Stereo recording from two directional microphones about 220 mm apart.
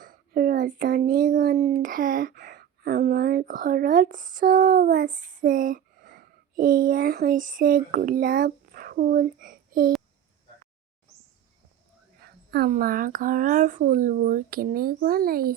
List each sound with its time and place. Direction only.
0.0 s speech: 40° right (ahead or behind)
12.2 s speech: 45° right (ahead or behind)